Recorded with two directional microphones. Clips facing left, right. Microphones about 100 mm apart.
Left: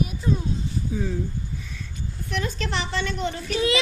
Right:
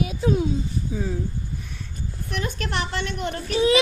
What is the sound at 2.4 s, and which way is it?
Speech, 60° right (ahead or behind).